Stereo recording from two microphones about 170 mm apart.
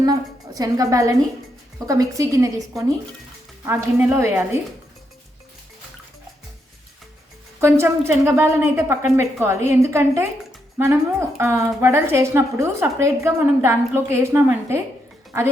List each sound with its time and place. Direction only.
0.0 s a woman's voice: 20° right (ahead or behind)
3.7 s a woman's voice: 15° right (ahead or behind)
7.6 s a woman's voice: 15° right (ahead or behind)